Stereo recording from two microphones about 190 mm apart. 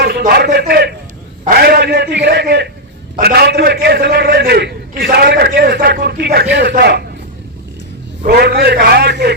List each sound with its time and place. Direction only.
0.0 s a man's voice: 55° right (ahead or behind)
8.2 s a man's voice: 55° right (ahead or behind)